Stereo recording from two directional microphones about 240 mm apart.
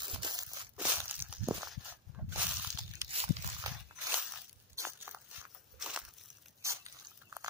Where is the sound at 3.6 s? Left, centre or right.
Centre.